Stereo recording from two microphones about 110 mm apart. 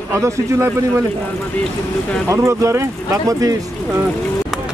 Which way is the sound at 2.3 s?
25° right (ahead or behind).